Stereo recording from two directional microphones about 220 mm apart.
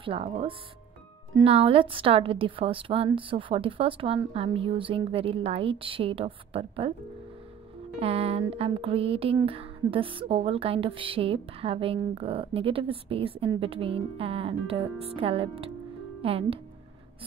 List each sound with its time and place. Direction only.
0.0 s speech: 25° right (ahead or behind)
8.0 s speech: 25° right (ahead or behind)